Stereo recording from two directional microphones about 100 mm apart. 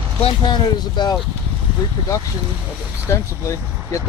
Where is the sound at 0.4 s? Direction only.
50° left (ahead or behind).